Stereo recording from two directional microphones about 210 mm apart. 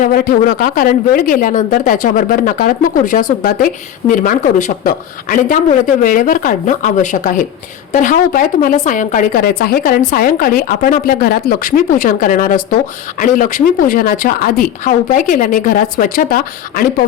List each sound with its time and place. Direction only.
0.0 s a woman's voice: 45° left (ahead or behind)